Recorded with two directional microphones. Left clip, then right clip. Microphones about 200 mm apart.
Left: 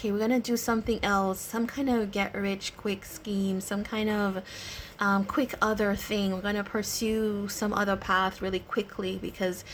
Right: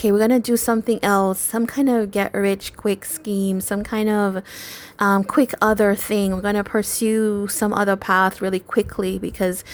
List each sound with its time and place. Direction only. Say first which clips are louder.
0.0 s speech: right 11 dB; 45° right (ahead or behind)